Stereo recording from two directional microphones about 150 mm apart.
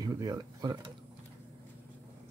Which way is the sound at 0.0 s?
25° right (ahead or behind).